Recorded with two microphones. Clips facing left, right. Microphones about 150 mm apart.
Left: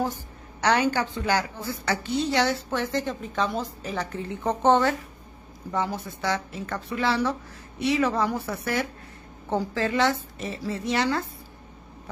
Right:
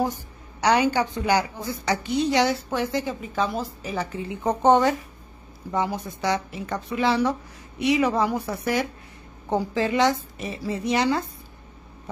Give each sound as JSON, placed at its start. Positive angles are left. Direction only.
{"t": 0.0, "sound": "a woman's voice", "side_deg": -15}